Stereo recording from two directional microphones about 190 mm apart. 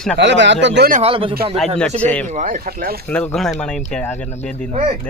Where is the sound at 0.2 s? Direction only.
70° right (ahead or behind).